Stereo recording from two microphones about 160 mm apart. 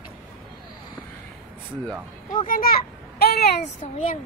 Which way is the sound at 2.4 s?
60° left (ahead or behind).